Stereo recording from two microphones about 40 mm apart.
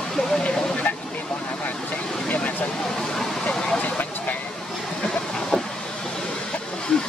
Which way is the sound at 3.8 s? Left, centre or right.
Left.